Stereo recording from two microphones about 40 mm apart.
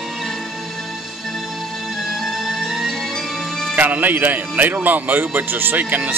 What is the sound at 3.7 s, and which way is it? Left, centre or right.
Speech, right.